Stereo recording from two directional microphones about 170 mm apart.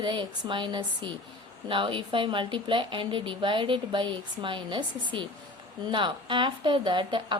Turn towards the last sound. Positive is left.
turn(degrees=-30)  # may be behind; listen again after turning